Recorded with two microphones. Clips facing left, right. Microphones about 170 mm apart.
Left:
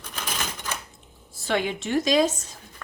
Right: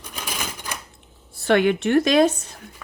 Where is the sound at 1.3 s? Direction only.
60° right (ahead or behind).